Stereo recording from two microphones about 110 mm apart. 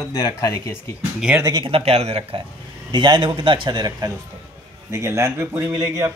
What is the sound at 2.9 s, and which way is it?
A man's voice, 45° right (ahead or behind).